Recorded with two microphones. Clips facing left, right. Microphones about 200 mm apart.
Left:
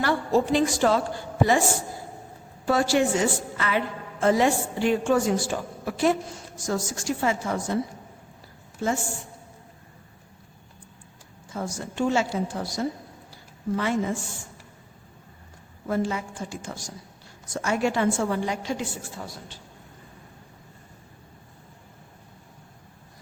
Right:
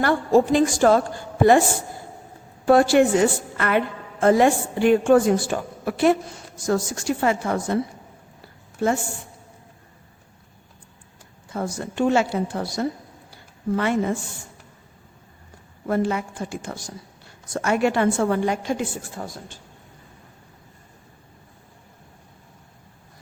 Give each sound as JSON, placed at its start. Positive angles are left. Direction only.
{"t": 0.0, "sound": "a woman's voice", "side_deg": -50}
{"t": 2.6, "sound": "a woman's voice", "side_deg": -55}
{"t": 8.8, "sound": "a woman's voice", "side_deg": -60}
{"t": 11.4, "sound": "a woman's voice", "side_deg": -60}
{"t": 13.3, "sound": "a sound", "side_deg": -60}
{"t": 15.9, "sound": "a woman's voice", "side_deg": -60}